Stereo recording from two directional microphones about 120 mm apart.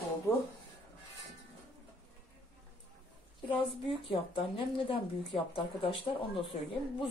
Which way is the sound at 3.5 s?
45° left (ahead or behind).